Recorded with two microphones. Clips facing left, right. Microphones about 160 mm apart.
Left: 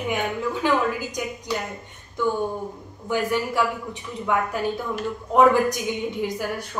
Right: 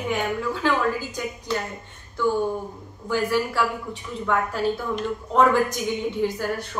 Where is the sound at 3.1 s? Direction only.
15° left (ahead or behind).